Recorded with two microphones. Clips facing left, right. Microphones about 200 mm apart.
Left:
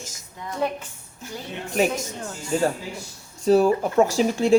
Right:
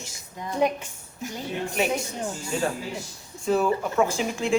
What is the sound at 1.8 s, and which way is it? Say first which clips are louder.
Speech: left 5 dB; 40° left (ahead or behind).